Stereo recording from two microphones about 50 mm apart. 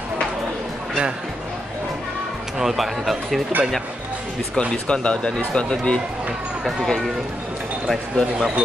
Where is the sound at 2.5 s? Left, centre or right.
Centre.